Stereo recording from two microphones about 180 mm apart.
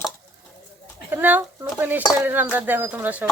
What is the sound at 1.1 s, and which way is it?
Speech, 10° right (ahead or behind).